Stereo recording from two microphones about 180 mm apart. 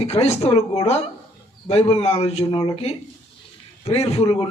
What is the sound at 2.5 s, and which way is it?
Speech, 20° left (ahead or behind).